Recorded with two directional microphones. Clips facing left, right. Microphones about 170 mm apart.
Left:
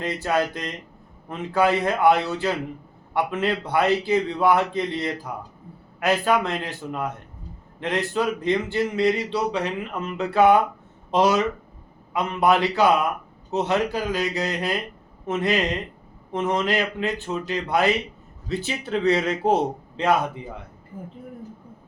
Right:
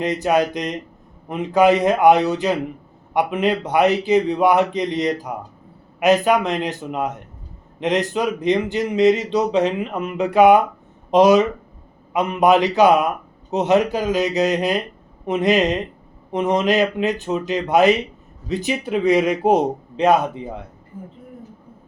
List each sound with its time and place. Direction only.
0.0 s a man's voice: 15° right (ahead or behind)